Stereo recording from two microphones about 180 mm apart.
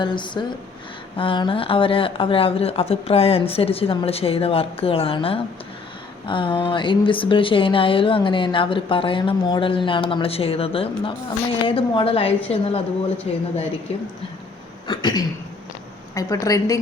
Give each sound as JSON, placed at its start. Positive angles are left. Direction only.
{"t": 0.0, "sound": "a woman's voice", "side_deg": 25}
{"t": 14.8, "sound": "a sound", "side_deg": 25}
{"t": 16.1, "sound": "speech", "side_deg": 20}